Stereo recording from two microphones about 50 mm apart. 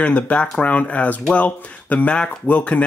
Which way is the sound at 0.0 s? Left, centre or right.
Left.